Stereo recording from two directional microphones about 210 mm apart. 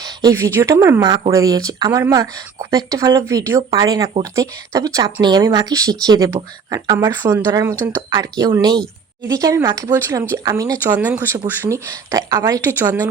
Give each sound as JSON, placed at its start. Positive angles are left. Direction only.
{"t": 0.0, "sound": "a woman's voice", "side_deg": -15}